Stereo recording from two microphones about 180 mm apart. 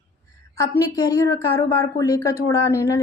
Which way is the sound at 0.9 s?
20° left (ahead or behind).